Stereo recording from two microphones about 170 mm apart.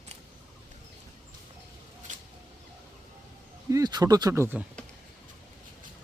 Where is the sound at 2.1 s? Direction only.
45° right (ahead or behind).